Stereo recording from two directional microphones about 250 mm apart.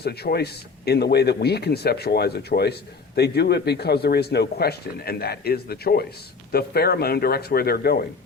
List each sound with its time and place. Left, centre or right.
0.0 s a man's voice: left